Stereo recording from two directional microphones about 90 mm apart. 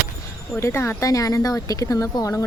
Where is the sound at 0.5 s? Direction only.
30° left (ahead or behind).